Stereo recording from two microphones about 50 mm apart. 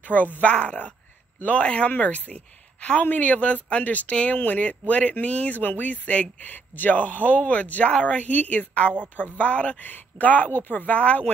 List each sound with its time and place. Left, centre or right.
0.0 s speech: left
0.5 s speech: left
11.0 s speech: left